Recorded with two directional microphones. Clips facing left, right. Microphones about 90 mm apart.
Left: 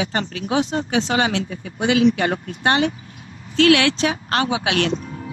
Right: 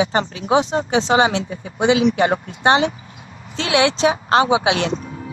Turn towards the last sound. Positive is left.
turn(degrees=-20)  # may be behind; listen again after turning